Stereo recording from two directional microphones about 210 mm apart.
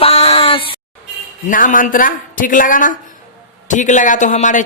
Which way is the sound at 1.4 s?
40° left (ahead or behind).